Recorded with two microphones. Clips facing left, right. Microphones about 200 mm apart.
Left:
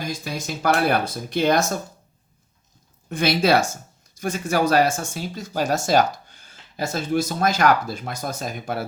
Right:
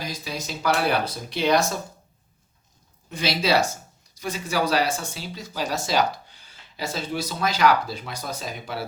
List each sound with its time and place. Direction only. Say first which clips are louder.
0.0 s speech: left 3 dB; 50° left (ahead or behind)
3.1 s speech: left 4 dB; 50° left (ahead or behind)